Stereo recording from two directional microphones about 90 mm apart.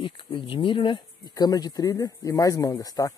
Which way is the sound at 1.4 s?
45° left (ahead or behind).